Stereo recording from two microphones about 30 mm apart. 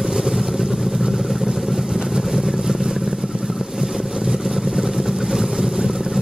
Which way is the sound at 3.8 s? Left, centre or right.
Right.